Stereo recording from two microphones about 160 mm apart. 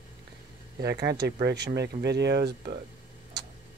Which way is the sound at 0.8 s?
90° right.